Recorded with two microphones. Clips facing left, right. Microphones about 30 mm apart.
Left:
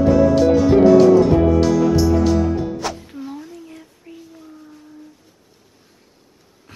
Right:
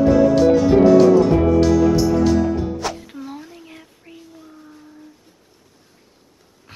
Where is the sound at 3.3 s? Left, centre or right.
Centre.